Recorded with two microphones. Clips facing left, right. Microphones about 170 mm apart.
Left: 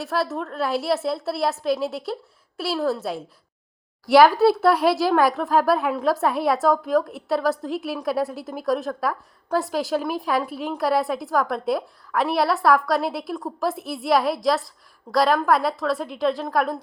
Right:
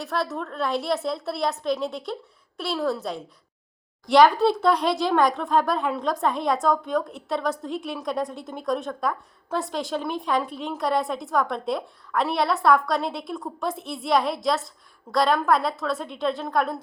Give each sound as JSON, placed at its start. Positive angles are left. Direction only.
{"t": 0.0, "sound": "speech", "side_deg": 0}